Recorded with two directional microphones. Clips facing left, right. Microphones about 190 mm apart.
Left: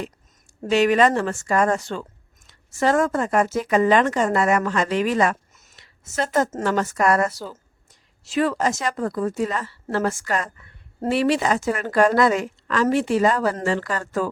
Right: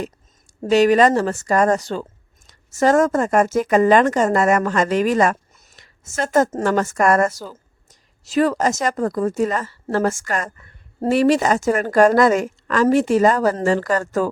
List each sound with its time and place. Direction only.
0.6 s a woman's voice: 40° right (ahead or behind)